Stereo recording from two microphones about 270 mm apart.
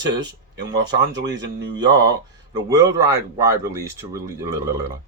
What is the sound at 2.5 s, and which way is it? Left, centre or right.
A man's voice, centre.